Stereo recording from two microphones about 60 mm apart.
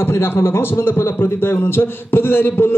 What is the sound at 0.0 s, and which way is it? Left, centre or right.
A man's voice, left.